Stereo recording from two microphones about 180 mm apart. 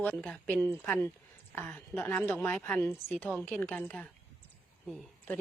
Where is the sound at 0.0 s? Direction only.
5° left (ahead or behind).